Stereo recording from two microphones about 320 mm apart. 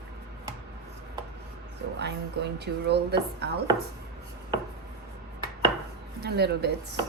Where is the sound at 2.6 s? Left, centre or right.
Right.